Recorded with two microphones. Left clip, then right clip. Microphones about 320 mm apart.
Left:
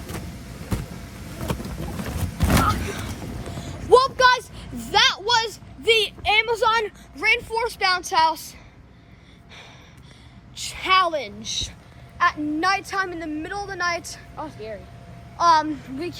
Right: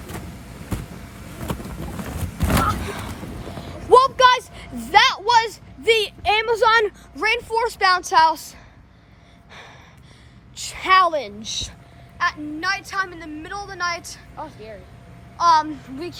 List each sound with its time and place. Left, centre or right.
1.4 s a sound: centre
10.8 s a woman's voice: centre
12.1 s a woman's voice: centre
15.4 s a child's voice: centre